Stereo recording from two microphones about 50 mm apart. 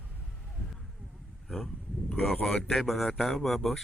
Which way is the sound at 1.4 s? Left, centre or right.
Centre.